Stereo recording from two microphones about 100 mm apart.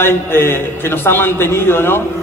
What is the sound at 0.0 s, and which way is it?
Speech, 25° left (ahead or behind).